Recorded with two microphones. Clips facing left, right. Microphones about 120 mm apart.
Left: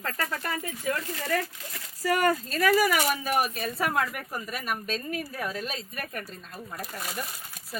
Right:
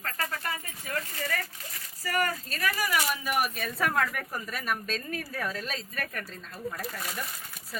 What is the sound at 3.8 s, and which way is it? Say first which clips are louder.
A woman's voice: even; 15° left (ahead or behind).